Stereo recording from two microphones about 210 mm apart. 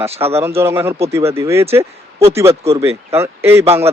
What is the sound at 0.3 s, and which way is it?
Speech, 10° right (ahead or behind).